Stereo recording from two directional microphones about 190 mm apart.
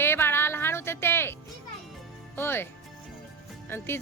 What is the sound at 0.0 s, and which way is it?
Music, 10° left (ahead or behind).